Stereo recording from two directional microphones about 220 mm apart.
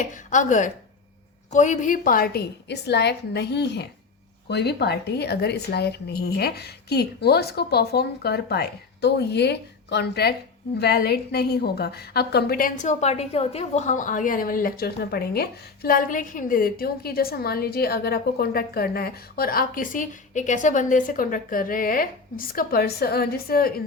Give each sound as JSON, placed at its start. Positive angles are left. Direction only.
{"t": 0.0, "sound": "a woman's voice", "side_deg": 35}